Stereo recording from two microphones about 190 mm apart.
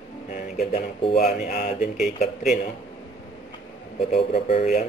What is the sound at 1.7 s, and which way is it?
Speech, centre (ahead or behind).